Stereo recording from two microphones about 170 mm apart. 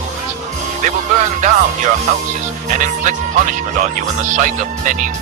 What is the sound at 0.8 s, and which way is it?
Speech, 45° right (ahead or behind).